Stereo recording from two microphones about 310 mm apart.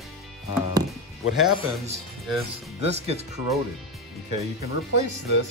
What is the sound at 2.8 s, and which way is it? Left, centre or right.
Speech, centre.